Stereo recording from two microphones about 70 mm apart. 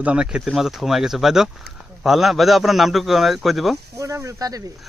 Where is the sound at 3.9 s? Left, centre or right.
Right.